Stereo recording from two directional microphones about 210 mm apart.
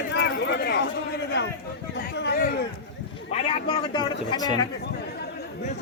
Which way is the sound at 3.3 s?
25° left (ahead or behind).